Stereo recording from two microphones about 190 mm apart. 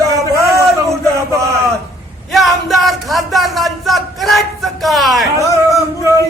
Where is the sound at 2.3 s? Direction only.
Centre (ahead or behind).